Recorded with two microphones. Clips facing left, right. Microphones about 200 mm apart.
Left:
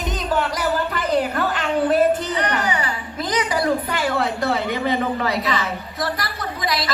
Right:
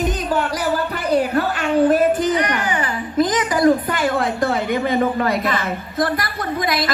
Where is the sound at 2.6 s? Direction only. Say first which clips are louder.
Right 2 dB; 45° right (ahead or behind).